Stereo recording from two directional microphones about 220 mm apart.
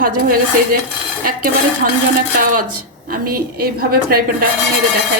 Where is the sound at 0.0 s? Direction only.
40° right (ahead or behind).